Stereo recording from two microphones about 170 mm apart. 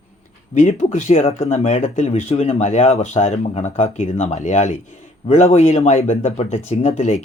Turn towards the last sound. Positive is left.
turn(degrees=40)  # may be behind; listen again after turning